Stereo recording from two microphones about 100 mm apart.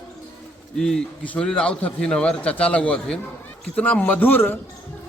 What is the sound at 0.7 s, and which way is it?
A man's voice, 5° left (ahead or behind).